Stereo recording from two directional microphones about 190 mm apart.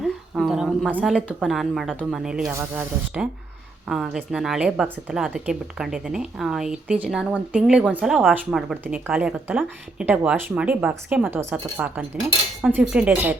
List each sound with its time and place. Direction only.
0.0 s a woman's voice: centre (ahead or behind)